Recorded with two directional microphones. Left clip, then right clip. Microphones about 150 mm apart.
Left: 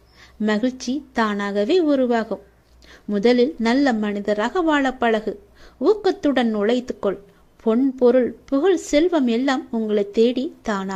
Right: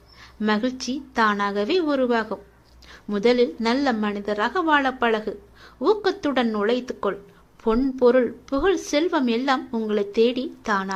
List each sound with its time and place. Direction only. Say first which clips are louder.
0.3 s a woman's voice: left 1 dB; 50° left (ahead or behind)
7.6 s a woman's voice: left 2 dB; 40° left (ahead or behind)